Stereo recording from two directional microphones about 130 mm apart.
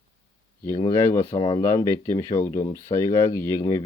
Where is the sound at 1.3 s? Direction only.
35° left (ahead or behind).